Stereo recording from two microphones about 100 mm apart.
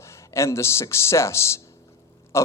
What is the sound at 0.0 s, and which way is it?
Speech, 30° left (ahead or behind).